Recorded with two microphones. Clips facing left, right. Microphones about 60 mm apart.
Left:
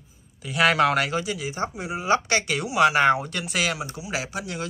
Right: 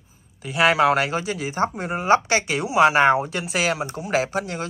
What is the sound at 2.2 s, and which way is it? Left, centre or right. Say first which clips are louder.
Speech: right 2 dB; right.